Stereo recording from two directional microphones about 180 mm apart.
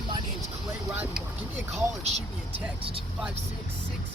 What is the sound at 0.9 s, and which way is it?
Speech, 10° right (ahead or behind).